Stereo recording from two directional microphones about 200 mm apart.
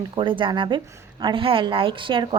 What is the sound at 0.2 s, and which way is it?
A woman's voice, 25° right (ahead or behind).